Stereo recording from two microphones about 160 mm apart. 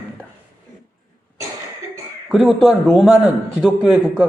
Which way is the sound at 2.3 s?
Centre (ahead or behind).